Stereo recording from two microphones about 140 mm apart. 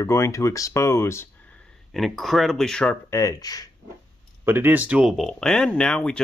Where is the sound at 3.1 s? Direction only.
20° left (ahead or behind).